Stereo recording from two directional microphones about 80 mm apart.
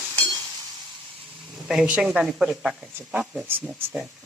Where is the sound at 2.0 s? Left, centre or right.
Centre.